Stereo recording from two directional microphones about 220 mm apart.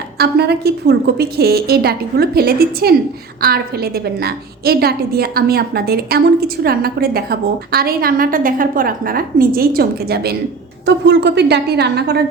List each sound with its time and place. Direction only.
0.2 s a woman's voice: 45° right (ahead or behind)